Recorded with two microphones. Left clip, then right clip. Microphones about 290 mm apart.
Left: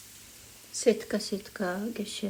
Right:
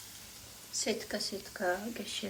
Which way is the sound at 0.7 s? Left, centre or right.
Left.